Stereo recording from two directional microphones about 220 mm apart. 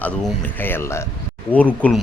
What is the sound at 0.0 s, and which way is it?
A man's voice, 5° left (ahead or behind).